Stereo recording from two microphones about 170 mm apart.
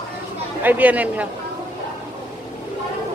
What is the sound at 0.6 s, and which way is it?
Speech, 10° right (ahead or behind).